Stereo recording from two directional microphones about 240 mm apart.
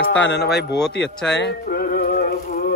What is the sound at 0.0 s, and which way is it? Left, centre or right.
Speech, left.